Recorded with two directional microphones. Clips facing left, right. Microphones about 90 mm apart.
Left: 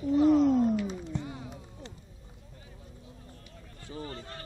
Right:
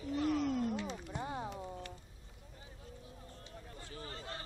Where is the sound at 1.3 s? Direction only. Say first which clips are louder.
Right 1 dB; 30° right (ahead or behind).